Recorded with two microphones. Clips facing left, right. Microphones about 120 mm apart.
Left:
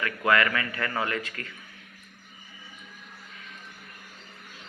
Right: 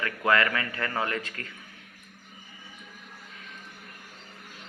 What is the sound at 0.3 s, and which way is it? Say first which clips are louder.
A man's voice: left 1 dB; 30° right (ahead or behind).